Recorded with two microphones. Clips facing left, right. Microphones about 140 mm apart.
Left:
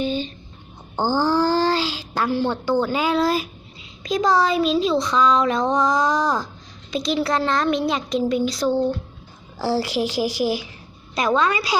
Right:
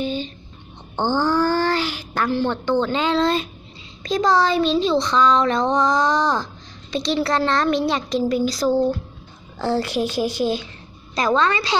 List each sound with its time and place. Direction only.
0.9 s speech: 10° left (ahead or behind)
9.6 s a woman's voice: 10° left (ahead or behind)